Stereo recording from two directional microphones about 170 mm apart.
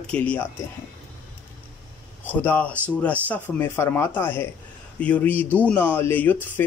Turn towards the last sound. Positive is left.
turn(degrees=10)  # may be behind; listen again after turning